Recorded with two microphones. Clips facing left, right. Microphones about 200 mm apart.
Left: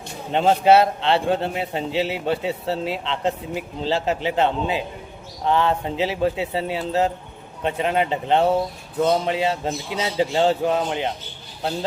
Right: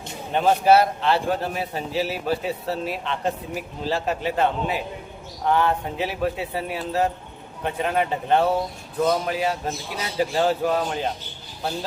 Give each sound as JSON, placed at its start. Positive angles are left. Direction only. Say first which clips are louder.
{"t": 0.3, "sound": "a man's voice", "louder": "left 2 dB", "side_deg": 25}